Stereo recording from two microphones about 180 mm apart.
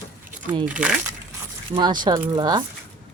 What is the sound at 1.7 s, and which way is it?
Speech, 25° right (ahead or behind).